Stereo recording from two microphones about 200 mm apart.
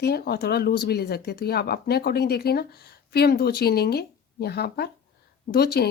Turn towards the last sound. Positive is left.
turn(degrees=55)  # may be behind; listen again after turning